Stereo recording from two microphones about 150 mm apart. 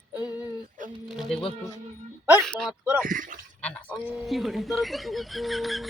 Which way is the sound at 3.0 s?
60° right (ahead or behind).